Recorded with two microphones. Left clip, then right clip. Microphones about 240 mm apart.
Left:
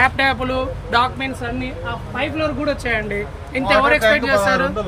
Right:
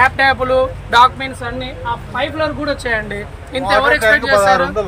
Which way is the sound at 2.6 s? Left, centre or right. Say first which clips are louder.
Right 2 dB; centre.